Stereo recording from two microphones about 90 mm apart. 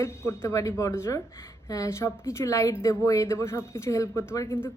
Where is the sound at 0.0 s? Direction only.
30° left (ahead or behind).